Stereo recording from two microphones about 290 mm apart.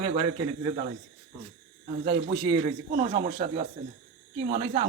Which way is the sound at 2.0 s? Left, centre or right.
Centre.